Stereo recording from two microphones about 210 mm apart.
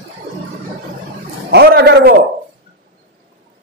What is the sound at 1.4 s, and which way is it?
Speech, 50° right (ahead or behind).